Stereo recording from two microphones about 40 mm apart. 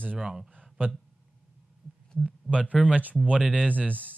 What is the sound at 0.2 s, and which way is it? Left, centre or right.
Speech, centre.